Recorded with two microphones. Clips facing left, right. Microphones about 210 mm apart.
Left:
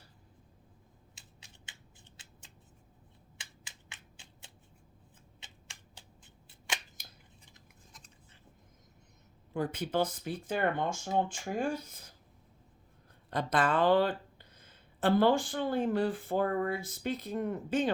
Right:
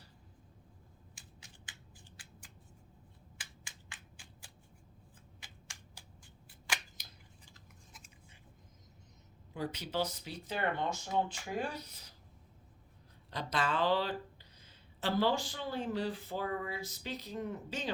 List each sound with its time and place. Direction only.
1.6 s scissors: 25° left (ahead or behind)
3.3 s finger snapping: 20° left (ahead or behind)
5.4 s scissors: 25° left (ahead or behind)
5.9 s shuffling cards: 25° left (ahead or behind)
7.0 s scissors: 50° left (ahead or behind)
9.5 s speech: 50° left (ahead or behind)
13.3 s speech: 50° left (ahead or behind)